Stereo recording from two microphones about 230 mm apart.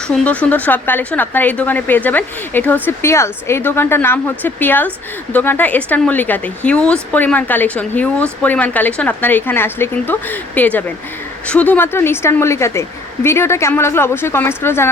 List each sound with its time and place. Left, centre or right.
0.1 s speech: centre